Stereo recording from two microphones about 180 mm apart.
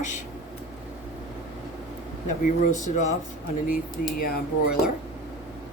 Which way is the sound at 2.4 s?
45° left (ahead or behind).